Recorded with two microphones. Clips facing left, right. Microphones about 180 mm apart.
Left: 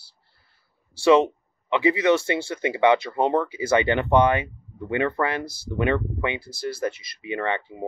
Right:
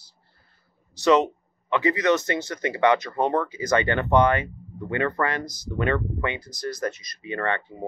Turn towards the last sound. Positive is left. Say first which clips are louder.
# left 1 dB
turn(degrees=10)  # may be behind; listen again after turning